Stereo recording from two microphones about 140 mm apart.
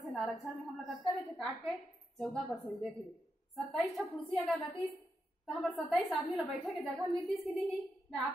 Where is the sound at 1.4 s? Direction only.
Centre (ahead or behind).